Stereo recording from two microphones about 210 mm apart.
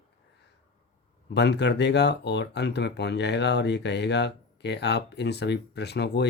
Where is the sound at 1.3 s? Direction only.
55° left (ahead or behind).